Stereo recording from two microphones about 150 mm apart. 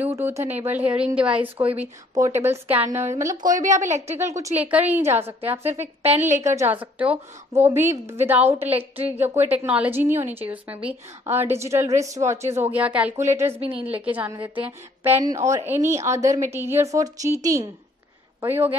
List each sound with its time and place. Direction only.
0.0 s a woman's voice: 15° right (ahead or behind)
6.0 s a woman's voice: 50° right (ahead or behind)
6.5 s a woman's voice: 15° right (ahead or behind)
13.6 s a woman's voice: 35° right (ahead or behind)
14.0 s a woman's voice: 10° right (ahead or behind)